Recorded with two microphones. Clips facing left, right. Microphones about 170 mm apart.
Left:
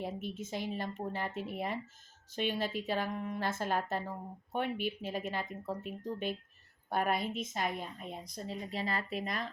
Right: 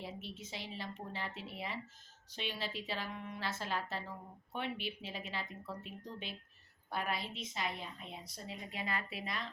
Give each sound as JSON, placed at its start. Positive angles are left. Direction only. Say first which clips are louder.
{"t": 0.0, "sound": "speech", "louder": "left 7 dB", "side_deg": 50}